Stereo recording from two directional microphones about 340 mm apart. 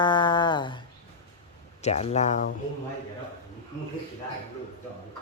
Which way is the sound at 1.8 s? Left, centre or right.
Centre.